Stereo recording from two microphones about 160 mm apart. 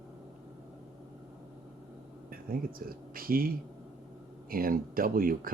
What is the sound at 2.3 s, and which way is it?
Speech, 65° right (ahead or behind).